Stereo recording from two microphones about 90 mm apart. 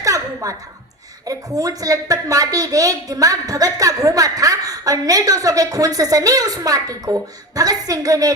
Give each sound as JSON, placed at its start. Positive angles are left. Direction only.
{"t": 0.0, "sound": "chuckle", "side_deg": -40}
{"t": 1.3, "sound": "a woman's voice", "side_deg": -40}